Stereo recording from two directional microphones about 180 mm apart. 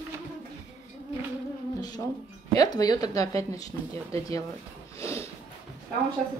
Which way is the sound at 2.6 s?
20° left (ahead or behind).